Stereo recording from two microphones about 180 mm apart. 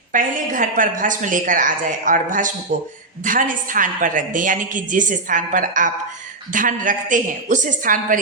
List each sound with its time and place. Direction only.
0.1 s a woman's voice: 50° right (ahead or behind)